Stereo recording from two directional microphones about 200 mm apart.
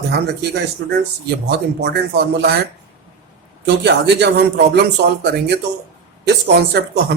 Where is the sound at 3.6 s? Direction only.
55° right (ahead or behind).